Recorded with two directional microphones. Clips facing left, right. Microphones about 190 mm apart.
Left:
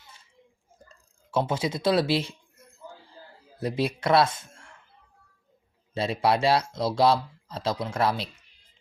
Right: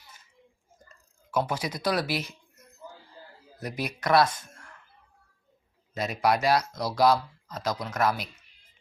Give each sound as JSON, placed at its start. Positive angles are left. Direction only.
{"t": 0.0, "sound": "bathtub", "side_deg": 30}
{"t": 0.8, "sound": "a sound", "side_deg": 30}
{"t": 3.6, "sound": "speech", "side_deg": 30}
{"t": 5.9, "sound": "speech", "side_deg": 30}